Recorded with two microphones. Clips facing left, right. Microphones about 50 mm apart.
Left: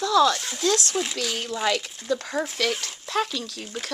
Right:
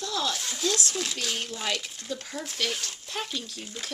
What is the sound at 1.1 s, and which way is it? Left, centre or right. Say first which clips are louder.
Speech: left 4 dB; left.